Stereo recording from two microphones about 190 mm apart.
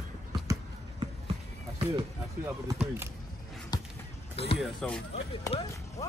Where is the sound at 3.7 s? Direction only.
20° left (ahead or behind).